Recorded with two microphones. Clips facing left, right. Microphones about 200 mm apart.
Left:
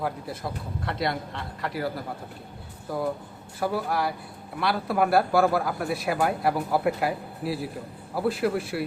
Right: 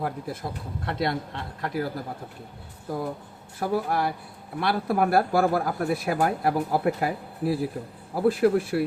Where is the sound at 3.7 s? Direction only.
45° right (ahead or behind).